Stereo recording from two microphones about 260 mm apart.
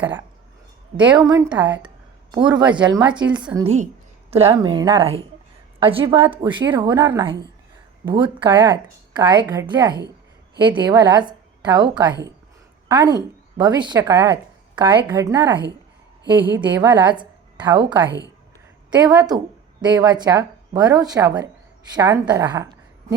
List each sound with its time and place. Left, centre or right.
1.1 s a woman's voice: centre